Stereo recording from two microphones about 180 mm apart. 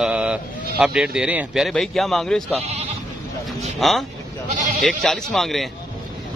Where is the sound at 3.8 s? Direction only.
Centre (ahead or behind).